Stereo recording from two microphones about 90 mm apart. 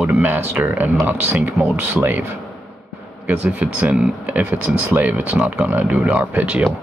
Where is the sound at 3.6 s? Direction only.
15° right (ahead or behind).